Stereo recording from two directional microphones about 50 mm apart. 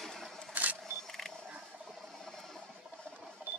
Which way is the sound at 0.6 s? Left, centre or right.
Right.